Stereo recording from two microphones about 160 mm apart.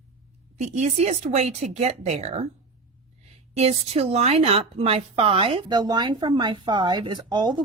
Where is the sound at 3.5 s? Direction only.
40° right (ahead or behind).